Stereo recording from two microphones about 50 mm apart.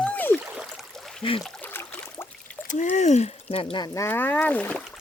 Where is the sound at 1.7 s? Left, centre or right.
Left.